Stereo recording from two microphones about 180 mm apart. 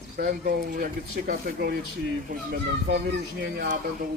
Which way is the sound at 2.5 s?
75° right (ahead or behind).